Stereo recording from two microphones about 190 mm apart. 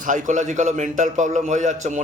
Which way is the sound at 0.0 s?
40° right (ahead or behind).